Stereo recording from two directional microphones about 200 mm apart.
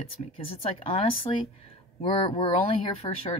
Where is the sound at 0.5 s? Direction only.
30° left (ahead or behind).